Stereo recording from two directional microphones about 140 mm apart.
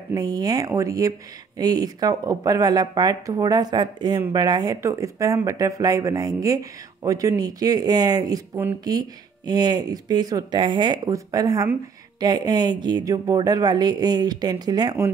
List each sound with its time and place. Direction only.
0.1 s speech: 25° right (ahead or behind)